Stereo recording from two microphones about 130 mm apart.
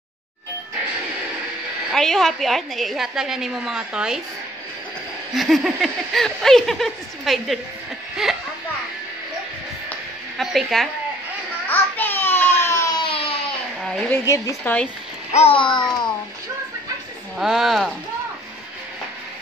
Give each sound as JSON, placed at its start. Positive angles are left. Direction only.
{"t": 1.9, "sound": "a woman's voice", "side_deg": 5}
{"t": 5.3, "sound": "a woman's voice", "side_deg": 0}
{"t": 10.3, "sound": "a woman's voice", "side_deg": 0}
{"t": 11.7, "sound": "baby cry", "side_deg": 15}
{"t": 12.9, "sound": "a sound", "side_deg": 40}
{"t": 13.8, "sound": "a woman's voice", "side_deg": 10}
{"t": 14.2, "sound": "speech", "side_deg": 25}
{"t": 14.6, "sound": "speech", "side_deg": 10}
{"t": 15.3, "sound": "a child's voice", "side_deg": 45}
{"t": 17.4, "sound": "a woman's voice", "side_deg": 0}